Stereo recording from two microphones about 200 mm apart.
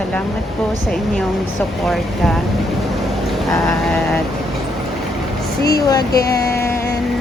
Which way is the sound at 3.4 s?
Centre (ahead or behind).